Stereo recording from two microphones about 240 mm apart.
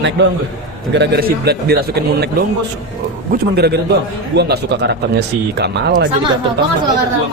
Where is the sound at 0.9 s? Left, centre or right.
Right.